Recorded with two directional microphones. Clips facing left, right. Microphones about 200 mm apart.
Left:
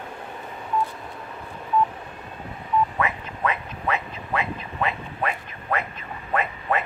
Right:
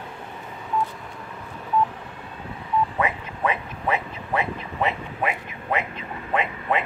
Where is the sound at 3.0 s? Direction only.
20° right (ahead or behind).